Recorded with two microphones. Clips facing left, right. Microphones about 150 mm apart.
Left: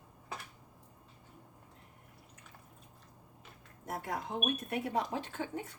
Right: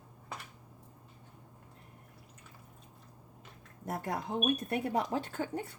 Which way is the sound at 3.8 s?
40° right (ahead or behind).